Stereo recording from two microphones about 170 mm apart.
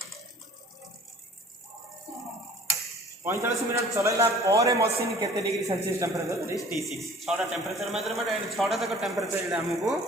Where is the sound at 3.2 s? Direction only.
15° right (ahead or behind).